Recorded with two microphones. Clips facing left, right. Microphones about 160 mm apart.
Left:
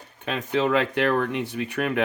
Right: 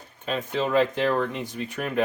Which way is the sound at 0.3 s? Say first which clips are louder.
Left 3 dB; 75° left (ahead or behind).